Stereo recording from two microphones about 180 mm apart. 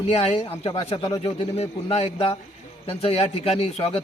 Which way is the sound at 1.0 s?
20° left (ahead or behind).